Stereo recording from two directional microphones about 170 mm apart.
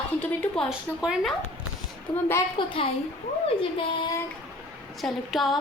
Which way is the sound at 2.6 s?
30° left (ahead or behind).